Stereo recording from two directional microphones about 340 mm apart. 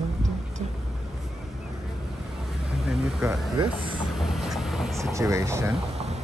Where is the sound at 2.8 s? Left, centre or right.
Centre.